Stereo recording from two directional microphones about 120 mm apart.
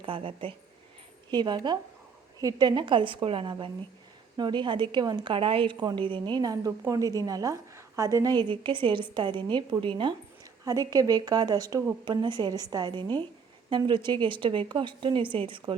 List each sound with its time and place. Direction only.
0.0 s a woman's voice: 45° right (ahead or behind)
10.7 s a woman's voice: 30° right (ahead or behind)